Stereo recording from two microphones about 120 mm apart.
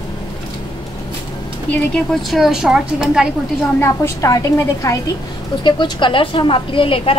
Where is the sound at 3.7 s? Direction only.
20° left (ahead or behind).